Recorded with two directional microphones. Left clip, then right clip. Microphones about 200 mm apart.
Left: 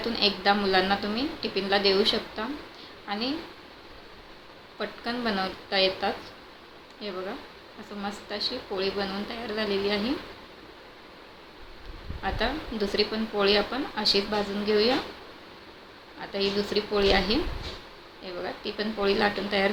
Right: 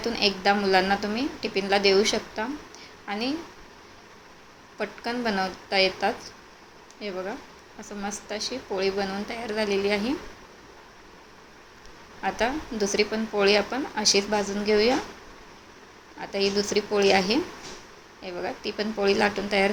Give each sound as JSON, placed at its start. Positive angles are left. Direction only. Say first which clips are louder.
{"t": 0.0, "sound": "speech", "louder": "right 1 dB", "side_deg": -20}
{"t": 4.8, "sound": "speech", "louder": "right 2 dB", "side_deg": -20}
{"t": 8.0, "sound": "speech", "louder": "even", "side_deg": -20}
{"t": 12.2, "sound": "speech", "louder": "right 3 dB", "side_deg": -20}
{"t": 16.2, "sound": "speech", "louder": "right 2 dB", "side_deg": -25}